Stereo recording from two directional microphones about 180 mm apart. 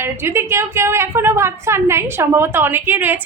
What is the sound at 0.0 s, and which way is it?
A woman's voice, 15° right (ahead or behind).